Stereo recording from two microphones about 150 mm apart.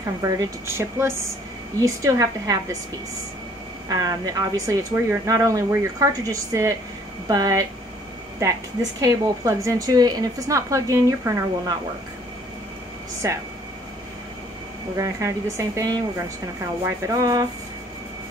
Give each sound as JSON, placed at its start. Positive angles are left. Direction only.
{"t": 0.0, "sound": "speech", "side_deg": -25}
{"t": 3.9, "sound": "speech", "side_deg": -25}
{"t": 9.0, "sound": "speech", "side_deg": -20}
{"t": 13.2, "sound": "speech", "side_deg": -20}
{"t": 15.0, "sound": "speech", "side_deg": -20}
{"t": 17.1, "sound": "speech", "side_deg": -20}